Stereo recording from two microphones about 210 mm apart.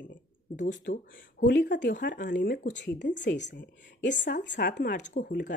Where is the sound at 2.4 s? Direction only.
60° left (ahead or behind).